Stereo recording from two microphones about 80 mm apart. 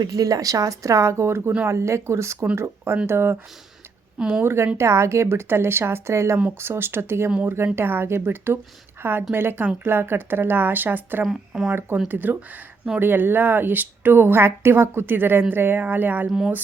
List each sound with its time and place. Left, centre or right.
0.0 s a woman's voice: right
4.2 s speech: centre
4.4 s a woman's voice: right
11.3 s speech: centre
11.7 s a woman's voice: right